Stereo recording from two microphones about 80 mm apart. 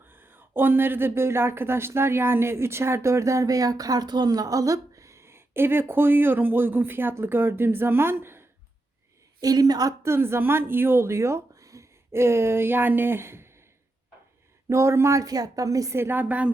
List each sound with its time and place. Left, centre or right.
0.0 s speech: right
9.4 s a woman's voice: right
10.0 s speech: right
14.7 s a woman's voice: right
16.0 s a woman's voice: right